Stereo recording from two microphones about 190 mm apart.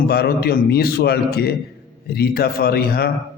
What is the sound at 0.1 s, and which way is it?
A man's voice, 55° left (ahead or behind).